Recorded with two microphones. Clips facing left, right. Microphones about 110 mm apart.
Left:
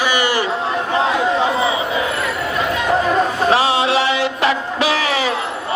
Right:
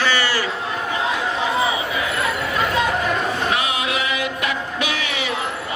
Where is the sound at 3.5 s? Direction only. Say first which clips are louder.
Left 7 dB; 30° left (ahead or behind).